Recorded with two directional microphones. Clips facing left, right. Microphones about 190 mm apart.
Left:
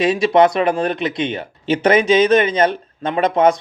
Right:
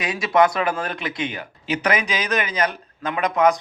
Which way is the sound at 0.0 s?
25° left (ahead or behind).